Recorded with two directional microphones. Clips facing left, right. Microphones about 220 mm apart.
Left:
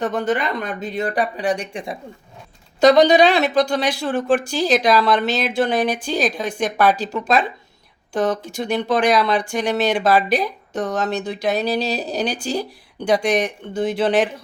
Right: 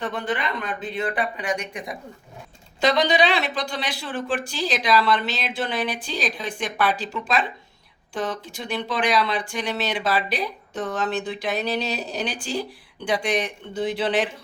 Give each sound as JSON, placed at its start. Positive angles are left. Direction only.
{"t": 0.0, "sound": "speech", "side_deg": 45}
{"t": 2.8, "sound": "speech", "side_deg": 45}